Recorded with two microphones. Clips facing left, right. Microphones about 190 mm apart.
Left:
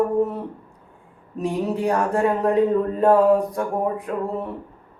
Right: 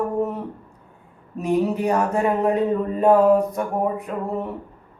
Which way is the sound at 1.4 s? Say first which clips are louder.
Right 3 dB; 60° right (ahead or behind).